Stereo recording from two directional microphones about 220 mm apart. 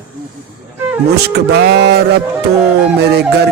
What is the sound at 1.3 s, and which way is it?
Speech, 50° right (ahead or behind).